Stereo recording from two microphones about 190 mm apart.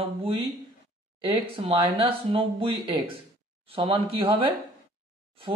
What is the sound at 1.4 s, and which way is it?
Speech, 30° right (ahead or behind).